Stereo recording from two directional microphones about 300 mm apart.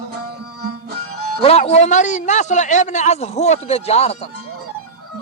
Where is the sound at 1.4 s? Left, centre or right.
Centre.